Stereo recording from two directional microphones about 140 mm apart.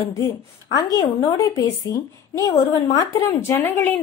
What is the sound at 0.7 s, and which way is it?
A woman's voice, 25° left (ahead or behind).